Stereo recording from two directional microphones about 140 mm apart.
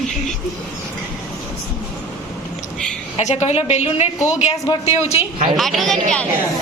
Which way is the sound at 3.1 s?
50° left (ahead or behind).